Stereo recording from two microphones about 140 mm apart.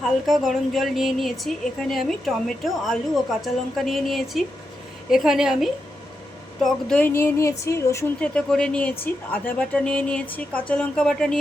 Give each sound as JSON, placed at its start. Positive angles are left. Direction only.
{"t": 0.3, "sound": "a woman's voice", "side_deg": 0}
{"t": 7.1, "sound": "speech", "side_deg": 20}
{"t": 8.2, "sound": "speech", "side_deg": 5}